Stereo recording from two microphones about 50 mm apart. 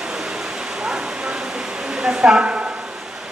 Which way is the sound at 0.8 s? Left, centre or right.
Centre.